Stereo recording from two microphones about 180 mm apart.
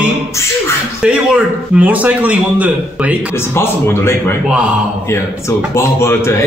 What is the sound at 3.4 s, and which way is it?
Speech, 15° left (ahead or behind).